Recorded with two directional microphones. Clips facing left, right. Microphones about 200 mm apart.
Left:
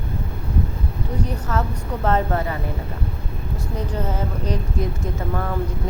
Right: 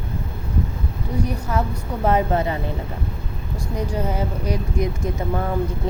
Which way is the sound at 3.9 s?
10° right (ahead or behind).